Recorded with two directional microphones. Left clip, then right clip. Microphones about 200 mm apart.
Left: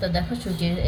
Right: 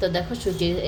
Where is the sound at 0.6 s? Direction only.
40° right (ahead or behind).